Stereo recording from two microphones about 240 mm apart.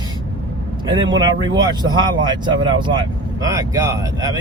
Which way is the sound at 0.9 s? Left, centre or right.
Centre.